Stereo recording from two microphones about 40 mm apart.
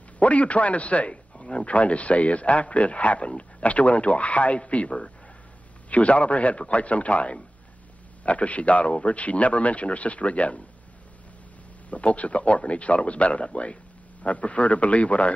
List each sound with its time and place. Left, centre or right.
0.2 s a man's voice: left
1.1 s a man's voice: left
11.9 s a man's voice: left